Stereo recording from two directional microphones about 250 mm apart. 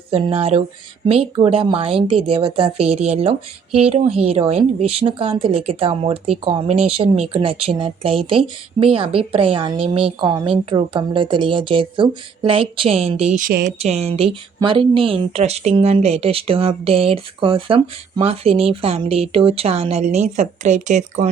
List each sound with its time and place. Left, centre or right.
0.1 s a woman's voice: right